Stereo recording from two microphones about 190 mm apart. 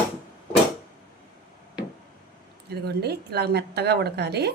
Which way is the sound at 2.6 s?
60° right (ahead or behind).